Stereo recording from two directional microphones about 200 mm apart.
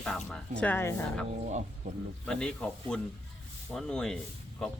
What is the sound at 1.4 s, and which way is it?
Speech, 35° right (ahead or behind).